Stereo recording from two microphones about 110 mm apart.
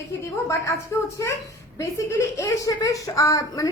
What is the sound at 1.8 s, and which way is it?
Speech, 25° left (ahead or behind).